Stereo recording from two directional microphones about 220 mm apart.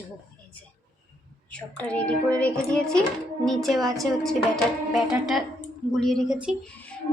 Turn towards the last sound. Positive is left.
turn(degrees=-5)  # may be behind; listen again after turning